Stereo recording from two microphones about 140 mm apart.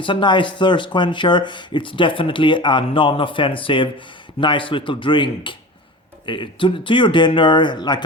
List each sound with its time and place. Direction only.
0.0 s speech: 35° left (ahead or behind)